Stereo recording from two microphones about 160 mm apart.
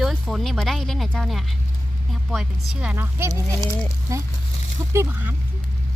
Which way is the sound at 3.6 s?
15° left (ahead or behind).